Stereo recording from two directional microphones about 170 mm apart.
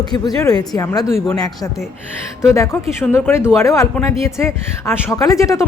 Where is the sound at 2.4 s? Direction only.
20° left (ahead or behind).